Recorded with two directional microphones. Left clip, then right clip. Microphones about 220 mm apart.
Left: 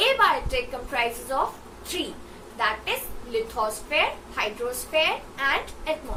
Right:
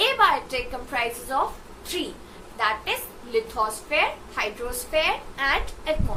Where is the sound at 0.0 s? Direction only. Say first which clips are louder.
Right 1 dB; 15° right (ahead or behind).